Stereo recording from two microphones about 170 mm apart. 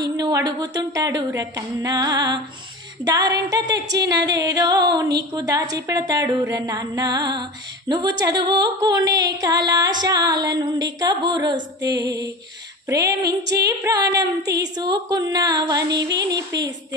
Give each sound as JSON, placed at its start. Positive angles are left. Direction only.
{"t": 0.0, "sound": "a woman's voice", "side_deg": -20}
{"t": 14.4, "sound": "a woman's voice", "side_deg": -80}
{"t": 14.8, "sound": "a woman's voice", "side_deg": -25}